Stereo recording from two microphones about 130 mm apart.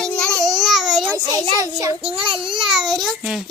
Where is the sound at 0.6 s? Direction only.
Centre (ahead or behind).